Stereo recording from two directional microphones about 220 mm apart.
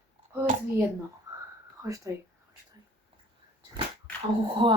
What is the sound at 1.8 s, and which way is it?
Speech, 15° right (ahead or behind).